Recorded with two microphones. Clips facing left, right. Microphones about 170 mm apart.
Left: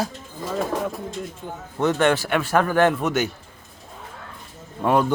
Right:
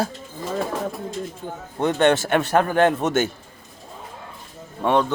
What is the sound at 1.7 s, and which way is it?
A man's voice, 20° right (ahead or behind).